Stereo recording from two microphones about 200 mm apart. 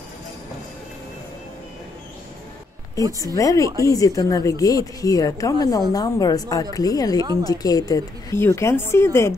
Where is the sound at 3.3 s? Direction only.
15° left (ahead or behind).